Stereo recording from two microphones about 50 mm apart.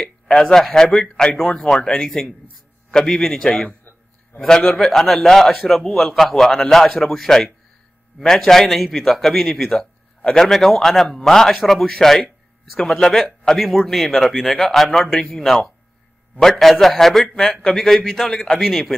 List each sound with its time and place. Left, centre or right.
0.0 s a man's voice: centre
17.7 s a man's voice: centre